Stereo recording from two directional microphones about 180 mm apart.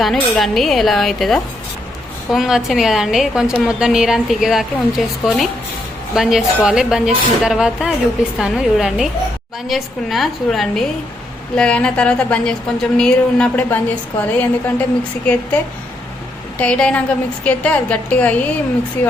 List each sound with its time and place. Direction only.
0.0 s a woman's voice: centre (ahead or behind)
16.6 s a woman's voice: 5° left (ahead or behind)